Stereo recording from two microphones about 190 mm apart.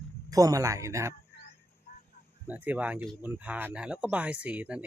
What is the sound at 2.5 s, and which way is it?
Speech, 10° right (ahead or behind).